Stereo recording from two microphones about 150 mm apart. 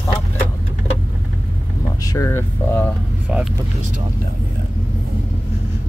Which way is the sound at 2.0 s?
20° left (ahead or behind).